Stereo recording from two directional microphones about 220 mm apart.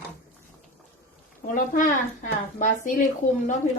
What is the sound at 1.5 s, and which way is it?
Speech, 40° left (ahead or behind).